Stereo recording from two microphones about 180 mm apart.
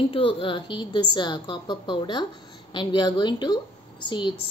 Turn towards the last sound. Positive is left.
turn(degrees=25)  # may be behind; listen again after turning